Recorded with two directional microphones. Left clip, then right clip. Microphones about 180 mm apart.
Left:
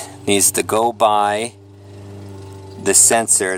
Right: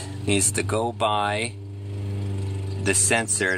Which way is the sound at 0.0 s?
65° left (ahead or behind).